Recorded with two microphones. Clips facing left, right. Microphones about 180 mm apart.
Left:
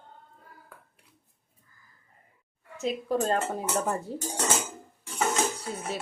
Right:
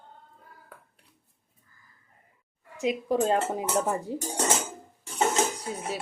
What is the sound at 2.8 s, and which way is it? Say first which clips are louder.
Speech: right 2 dB; 15° right (ahead or behind).